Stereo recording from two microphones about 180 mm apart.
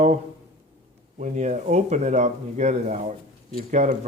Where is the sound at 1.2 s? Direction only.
40° right (ahead or behind).